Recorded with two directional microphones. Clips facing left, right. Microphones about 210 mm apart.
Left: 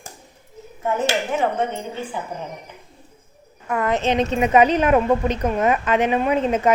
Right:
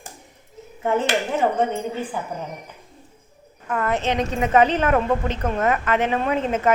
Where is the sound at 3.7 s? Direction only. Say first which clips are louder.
Left 2 dB; 10° left (ahead or behind).